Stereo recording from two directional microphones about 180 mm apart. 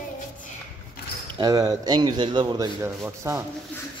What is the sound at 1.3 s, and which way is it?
Speech, 20° right (ahead or behind).